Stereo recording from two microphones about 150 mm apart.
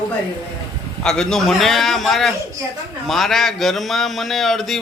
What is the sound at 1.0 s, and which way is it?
A man's voice, 5° left (ahead or behind).